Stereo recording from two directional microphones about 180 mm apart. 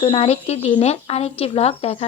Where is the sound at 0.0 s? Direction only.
30° left (ahead or behind).